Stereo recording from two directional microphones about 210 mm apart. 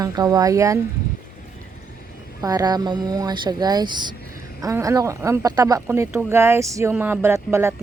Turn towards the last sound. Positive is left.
turn(degrees=-10)  # may be behind; listen again after turning